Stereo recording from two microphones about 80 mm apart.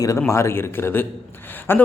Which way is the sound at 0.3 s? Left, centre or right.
Left.